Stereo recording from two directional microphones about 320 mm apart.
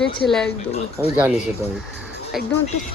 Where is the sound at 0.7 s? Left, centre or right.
Centre.